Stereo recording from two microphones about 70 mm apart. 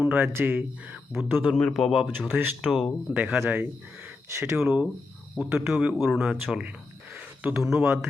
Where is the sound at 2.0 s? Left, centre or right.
Centre.